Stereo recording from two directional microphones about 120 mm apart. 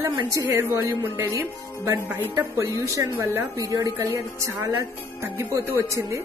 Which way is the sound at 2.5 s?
25° right (ahead or behind).